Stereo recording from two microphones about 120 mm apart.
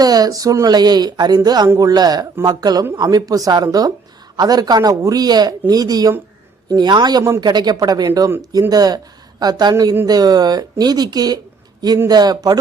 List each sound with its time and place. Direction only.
0.0 s speech: 30° right (ahead or behind)